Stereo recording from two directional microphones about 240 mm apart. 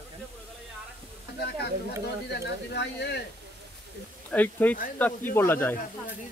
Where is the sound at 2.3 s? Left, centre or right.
Left.